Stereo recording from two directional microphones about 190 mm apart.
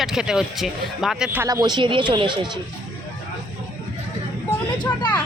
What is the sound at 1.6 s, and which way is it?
Speech, 25° right (ahead or behind).